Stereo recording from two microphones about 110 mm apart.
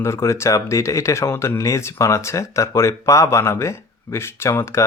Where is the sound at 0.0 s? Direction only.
25° left (ahead or behind).